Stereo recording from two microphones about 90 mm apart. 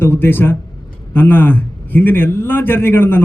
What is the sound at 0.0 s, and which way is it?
A man's voice, 25° left (ahead or behind).